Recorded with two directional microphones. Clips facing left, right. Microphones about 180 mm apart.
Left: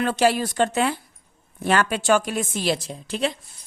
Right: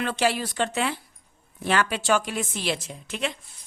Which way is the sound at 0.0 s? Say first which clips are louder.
Left 5 dB; 40° left (ahead or behind).